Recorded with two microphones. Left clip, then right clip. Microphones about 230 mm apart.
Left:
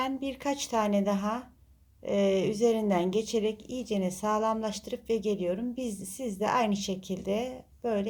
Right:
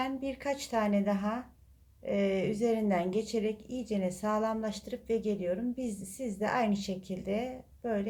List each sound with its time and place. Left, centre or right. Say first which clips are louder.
0.0 s a woman's voice: left 3 dB; left